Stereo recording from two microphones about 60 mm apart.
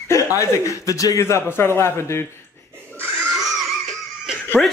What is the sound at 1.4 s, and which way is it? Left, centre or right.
Speech, left.